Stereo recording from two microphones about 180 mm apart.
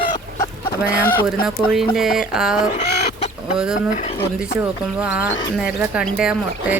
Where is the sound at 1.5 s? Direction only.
Centre (ahead or behind).